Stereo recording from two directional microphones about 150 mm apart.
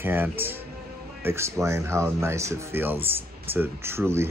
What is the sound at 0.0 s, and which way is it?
Speech, 15° right (ahead or behind).